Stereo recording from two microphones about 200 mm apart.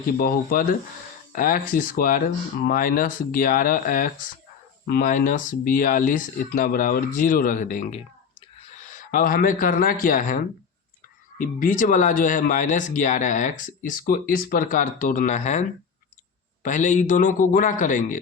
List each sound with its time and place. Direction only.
0.2 s speech: 45° left (ahead or behind)
16.6 s speech: 40° left (ahead or behind)